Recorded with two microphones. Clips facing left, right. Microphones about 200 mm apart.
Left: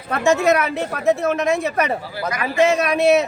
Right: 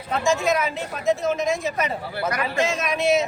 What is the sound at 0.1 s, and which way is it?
Speech, 65° left (ahead or behind).